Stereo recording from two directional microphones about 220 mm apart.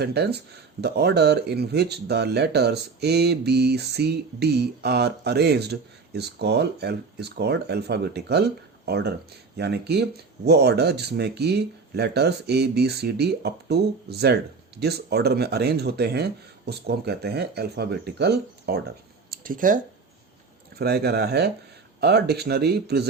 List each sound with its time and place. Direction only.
0.0 s speech: 45° right (ahead or behind)
19.3 s a sound: 40° right (ahead or behind)
20.7 s speech: 45° right (ahead or behind)